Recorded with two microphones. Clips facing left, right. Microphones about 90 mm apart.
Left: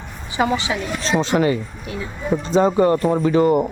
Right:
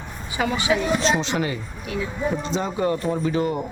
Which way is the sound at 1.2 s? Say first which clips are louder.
Left 7 dB; 40° left (ahead or behind).